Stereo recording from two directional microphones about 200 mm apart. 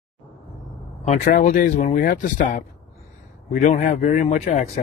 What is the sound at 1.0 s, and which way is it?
Speech, 40° left (ahead or behind).